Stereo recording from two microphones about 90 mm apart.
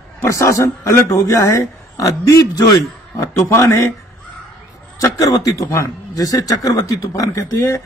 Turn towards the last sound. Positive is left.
turn(degrees=35)  # may be behind; listen again after turning